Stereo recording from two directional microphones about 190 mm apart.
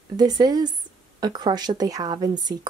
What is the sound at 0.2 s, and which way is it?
Speech, 20° right (ahead or behind).